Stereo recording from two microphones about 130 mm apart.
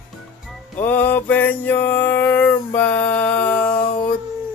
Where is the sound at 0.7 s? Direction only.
15° left (ahead or behind).